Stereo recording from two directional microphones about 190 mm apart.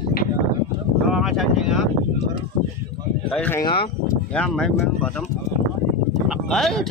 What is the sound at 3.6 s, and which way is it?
Speech, 25° left (ahead or behind).